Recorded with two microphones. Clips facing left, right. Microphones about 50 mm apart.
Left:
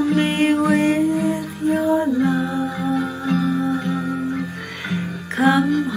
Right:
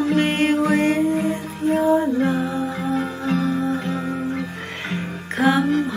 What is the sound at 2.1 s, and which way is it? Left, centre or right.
Music, right.